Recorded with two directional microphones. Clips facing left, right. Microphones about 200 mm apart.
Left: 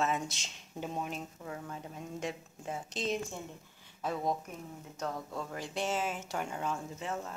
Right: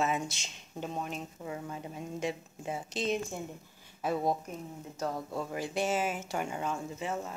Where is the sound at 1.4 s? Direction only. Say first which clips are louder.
Right 3 dB; 10° right (ahead or behind).